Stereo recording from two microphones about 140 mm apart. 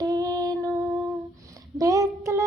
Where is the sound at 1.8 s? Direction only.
25° right (ahead or behind).